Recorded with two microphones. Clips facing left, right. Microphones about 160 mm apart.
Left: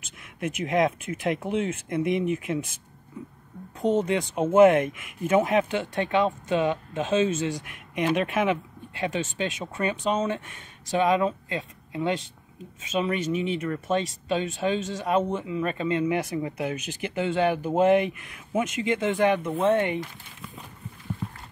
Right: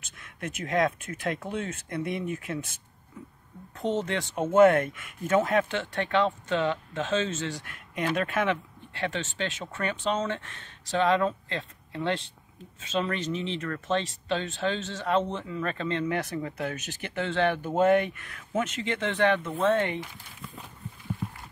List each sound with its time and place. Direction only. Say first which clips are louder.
0.4 s speech: left 3 dB; 20° left (ahead or behind)
3.8 s speech: left 5 dB; 15° left (ahead or behind)